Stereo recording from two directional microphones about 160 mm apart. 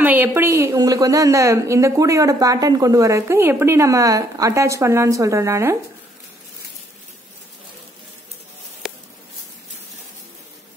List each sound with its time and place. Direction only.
0.0 s a woman's voice: 10° right (ahead or behind)